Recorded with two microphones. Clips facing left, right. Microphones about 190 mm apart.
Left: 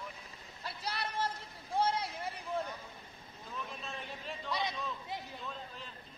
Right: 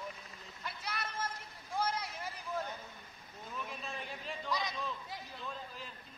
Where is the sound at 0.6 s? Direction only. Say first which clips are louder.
Left 3 dB; 35° left (ahead or behind).